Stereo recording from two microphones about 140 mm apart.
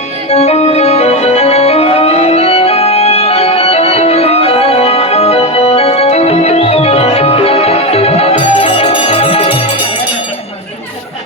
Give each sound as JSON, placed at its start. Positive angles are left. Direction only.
{"t": 0.3, "sound": "organ", "side_deg": 50}